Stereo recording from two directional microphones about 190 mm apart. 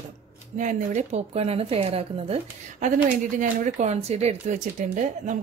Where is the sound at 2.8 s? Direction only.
45° right (ahead or behind).